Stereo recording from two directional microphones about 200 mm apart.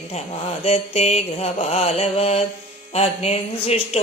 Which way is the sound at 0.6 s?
30° left (ahead or behind).